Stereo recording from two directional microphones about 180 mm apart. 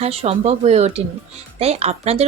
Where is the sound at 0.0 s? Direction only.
35° right (ahead or behind).